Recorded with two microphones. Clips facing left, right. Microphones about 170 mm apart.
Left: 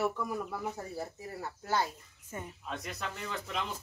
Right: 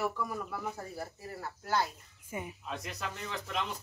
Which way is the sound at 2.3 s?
10° right (ahead or behind).